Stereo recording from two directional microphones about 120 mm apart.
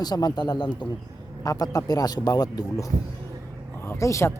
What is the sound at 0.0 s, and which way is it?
Speech, 35° left (ahead or behind).